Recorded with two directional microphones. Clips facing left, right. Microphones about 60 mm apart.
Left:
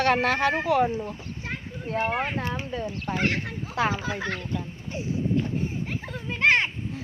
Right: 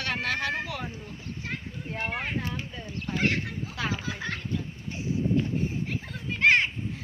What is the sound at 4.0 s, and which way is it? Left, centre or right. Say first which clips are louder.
Speech: left 4 dB; centre.